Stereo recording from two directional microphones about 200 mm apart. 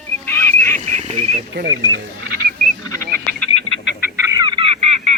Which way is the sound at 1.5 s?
70° right (ahead or behind).